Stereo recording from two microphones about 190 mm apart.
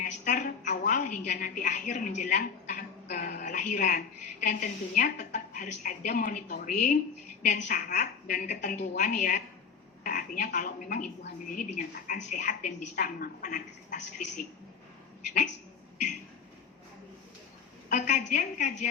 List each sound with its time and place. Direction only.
0.0 s a woman's voice: 45° left (ahead or behind)
17.8 s a woman's voice: 40° left (ahead or behind)